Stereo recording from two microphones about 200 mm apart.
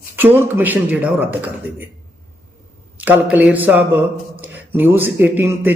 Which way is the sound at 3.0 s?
10° right (ahead or behind).